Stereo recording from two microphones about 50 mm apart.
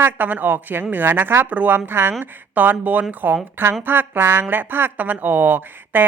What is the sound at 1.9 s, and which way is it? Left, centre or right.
Speech, right.